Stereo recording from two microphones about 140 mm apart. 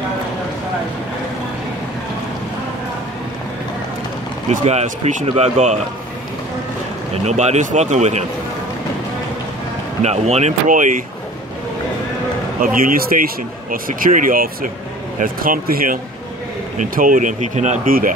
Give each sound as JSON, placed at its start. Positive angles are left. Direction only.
{"t": 4.5, "sound": "speech", "side_deg": -55}
{"t": 7.2, "sound": "speech", "side_deg": -55}
{"t": 10.0, "sound": "speech", "side_deg": -50}
{"t": 12.6, "sound": "speech", "side_deg": -90}
{"t": 16.7, "sound": "speech", "side_deg": -75}